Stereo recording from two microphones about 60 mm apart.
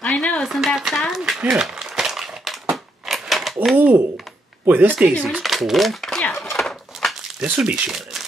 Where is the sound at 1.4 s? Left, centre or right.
Centre.